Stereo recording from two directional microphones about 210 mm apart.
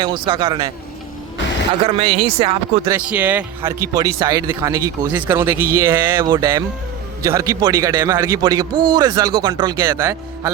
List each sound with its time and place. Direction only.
0.0 s speech: 25° right (ahead or behind)
1.8 s speech: 25° right (ahead or behind)
2.8 s a man's voice: 10° right (ahead or behind)